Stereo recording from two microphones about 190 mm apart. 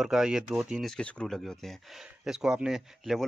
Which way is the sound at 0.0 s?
Centre (ahead or behind).